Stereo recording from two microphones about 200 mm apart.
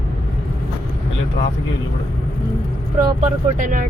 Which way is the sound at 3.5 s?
40° right (ahead or behind).